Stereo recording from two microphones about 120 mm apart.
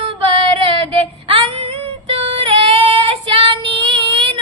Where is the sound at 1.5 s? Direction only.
50° right (ahead or behind).